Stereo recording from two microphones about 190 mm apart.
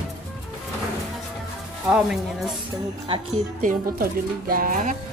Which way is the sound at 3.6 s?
50° right (ahead or behind).